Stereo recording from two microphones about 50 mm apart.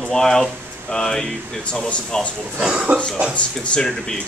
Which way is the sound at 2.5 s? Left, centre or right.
Centre.